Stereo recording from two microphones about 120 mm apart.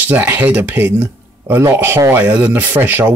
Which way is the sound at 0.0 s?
15° right (ahead or behind).